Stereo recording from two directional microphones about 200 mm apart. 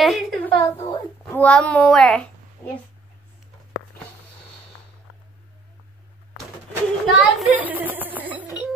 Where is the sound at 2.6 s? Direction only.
15° left (ahead or behind).